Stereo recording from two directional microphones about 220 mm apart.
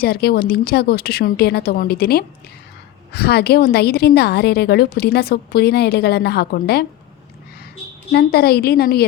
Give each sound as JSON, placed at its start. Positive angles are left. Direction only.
{"t": 0.0, "sound": "a woman's voice", "side_deg": 45}
{"t": 8.1, "sound": "a woman's voice", "side_deg": 45}